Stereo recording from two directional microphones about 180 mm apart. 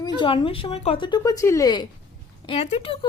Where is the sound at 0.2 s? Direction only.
30° left (ahead or behind).